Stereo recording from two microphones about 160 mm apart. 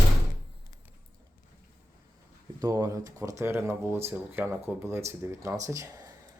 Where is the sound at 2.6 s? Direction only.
20° right (ahead or behind).